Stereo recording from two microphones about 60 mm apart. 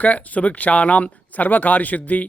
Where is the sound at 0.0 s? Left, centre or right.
Left.